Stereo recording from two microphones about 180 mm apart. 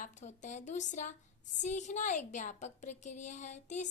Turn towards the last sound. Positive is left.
turn(degrees=40)  # may be behind; listen again after turning